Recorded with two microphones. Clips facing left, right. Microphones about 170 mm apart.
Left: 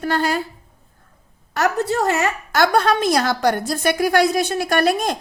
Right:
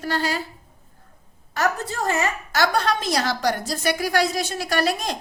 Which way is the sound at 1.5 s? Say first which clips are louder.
Left 5 dB; 65° left (ahead or behind).